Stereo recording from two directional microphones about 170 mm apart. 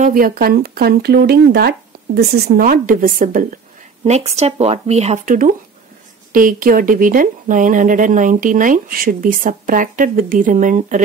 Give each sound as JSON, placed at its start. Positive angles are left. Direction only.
{"t": 0.0, "sound": "speech", "side_deg": -55}
{"t": 4.0, "sound": "speech", "side_deg": -40}